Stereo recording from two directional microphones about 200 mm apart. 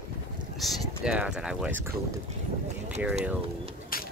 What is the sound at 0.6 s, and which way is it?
Speech, centre (ahead or behind).